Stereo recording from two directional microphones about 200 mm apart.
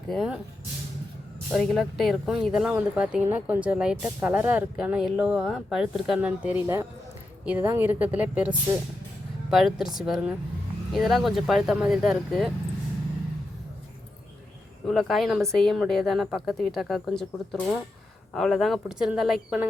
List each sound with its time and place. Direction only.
0.1 s speech: centre (ahead or behind)
1.5 s a woman's voice: 5° left (ahead or behind)
14.8 s speech: centre (ahead or behind)